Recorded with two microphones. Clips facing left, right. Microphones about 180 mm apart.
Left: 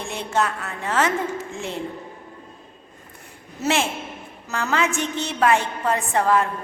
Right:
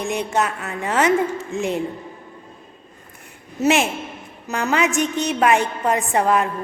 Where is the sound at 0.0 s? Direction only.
15° right (ahead or behind).